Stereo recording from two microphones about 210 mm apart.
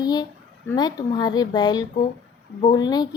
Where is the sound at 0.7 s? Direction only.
15° left (ahead or behind).